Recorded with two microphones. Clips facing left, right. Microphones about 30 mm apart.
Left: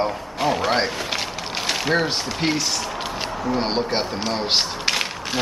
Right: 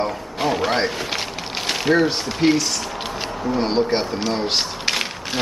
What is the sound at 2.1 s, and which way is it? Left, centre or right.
Speech, centre.